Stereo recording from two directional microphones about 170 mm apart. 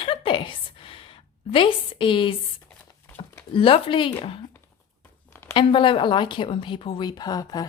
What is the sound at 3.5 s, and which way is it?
Speech, 30° left (ahead or behind).